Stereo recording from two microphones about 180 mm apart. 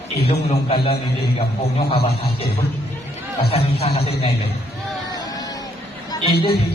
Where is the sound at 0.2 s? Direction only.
35° left (ahead or behind).